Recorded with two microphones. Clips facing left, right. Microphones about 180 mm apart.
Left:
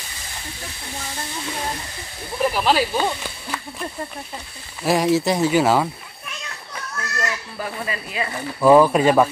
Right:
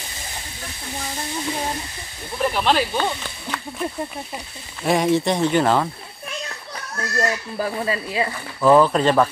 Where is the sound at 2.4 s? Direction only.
5° left (ahead or behind).